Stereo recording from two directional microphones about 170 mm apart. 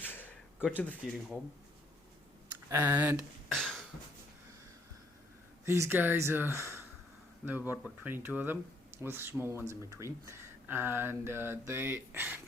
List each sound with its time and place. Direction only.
0.0 s a sound: 10° left (ahead or behind)
0.8 s speech: 5° left (ahead or behind)
2.5 s speech: 10° right (ahead or behind)
3.5 s cough: 5° left (ahead or behind)
5.6 s speech: 15° right (ahead or behind)